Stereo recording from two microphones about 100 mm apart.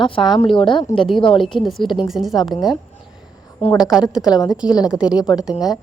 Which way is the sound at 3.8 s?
5° right (ahead or behind).